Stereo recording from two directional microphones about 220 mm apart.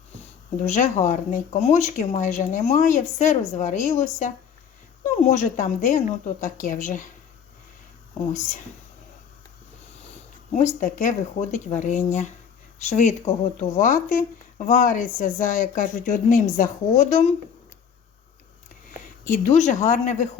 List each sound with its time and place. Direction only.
0.6 s speech: 30° left (ahead or behind)
10.5 s speech: 35° left (ahead or behind)
19.0 s speech: 35° left (ahead or behind)